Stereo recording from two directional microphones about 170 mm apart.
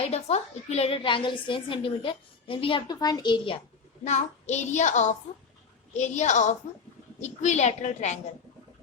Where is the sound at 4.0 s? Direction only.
45° left (ahead or behind).